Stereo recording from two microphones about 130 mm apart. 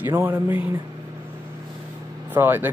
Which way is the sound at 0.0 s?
15° right (ahead or behind).